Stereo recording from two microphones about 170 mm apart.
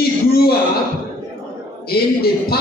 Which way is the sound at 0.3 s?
65° left (ahead or behind).